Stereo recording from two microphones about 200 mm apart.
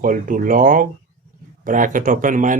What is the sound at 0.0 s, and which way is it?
Speech, 45° right (ahead or behind).